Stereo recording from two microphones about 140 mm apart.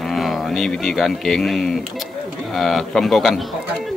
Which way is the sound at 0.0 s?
Centre (ahead or behind).